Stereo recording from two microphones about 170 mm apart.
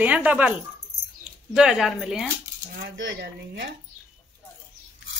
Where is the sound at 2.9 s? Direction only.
90° right.